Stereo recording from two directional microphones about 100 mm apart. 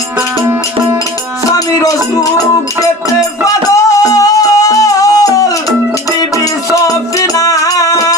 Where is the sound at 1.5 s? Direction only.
35° left (ahead or behind).